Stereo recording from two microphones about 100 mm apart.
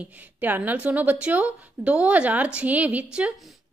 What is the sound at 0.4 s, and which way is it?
A woman's voice, 15° right (ahead or behind).